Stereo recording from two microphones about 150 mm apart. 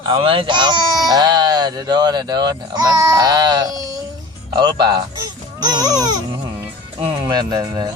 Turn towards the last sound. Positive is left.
turn(degrees=-30)  # may be behind; listen again after turning